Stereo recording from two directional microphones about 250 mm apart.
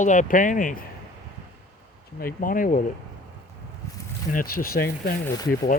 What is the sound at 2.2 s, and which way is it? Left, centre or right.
Speech, left.